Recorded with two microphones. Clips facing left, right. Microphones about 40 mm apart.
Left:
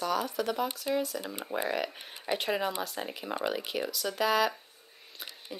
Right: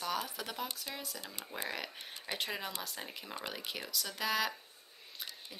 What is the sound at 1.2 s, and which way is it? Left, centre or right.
Speech, left.